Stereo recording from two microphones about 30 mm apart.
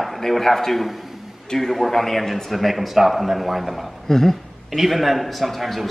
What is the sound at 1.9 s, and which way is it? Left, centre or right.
Speech, centre.